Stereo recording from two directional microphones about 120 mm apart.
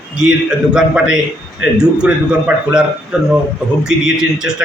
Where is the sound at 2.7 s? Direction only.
5° right (ahead or behind).